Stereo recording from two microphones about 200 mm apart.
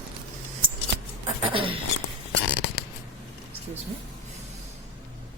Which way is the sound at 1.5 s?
25° right (ahead or behind).